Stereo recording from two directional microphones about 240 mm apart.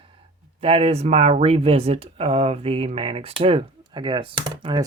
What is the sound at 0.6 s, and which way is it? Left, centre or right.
Speech, right.